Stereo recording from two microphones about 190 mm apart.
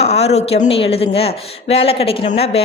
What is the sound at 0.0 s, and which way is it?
A woman's voice, 35° left (ahead or behind).